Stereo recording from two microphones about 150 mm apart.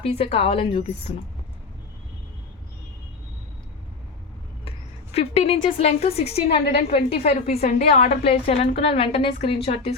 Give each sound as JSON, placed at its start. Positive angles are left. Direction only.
{"t": 0.0, "sound": "a woman's voice", "side_deg": 40}
{"t": 5.1, "sound": "a woman's voice", "side_deg": 45}